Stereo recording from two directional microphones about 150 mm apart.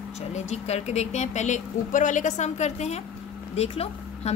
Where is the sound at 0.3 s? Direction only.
45° left (ahead or behind).